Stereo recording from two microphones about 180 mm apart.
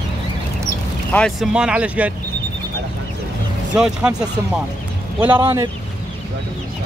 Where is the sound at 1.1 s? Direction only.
5° left (ahead or behind).